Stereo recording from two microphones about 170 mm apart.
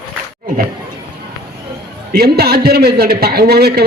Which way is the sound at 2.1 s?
70° right (ahead or behind).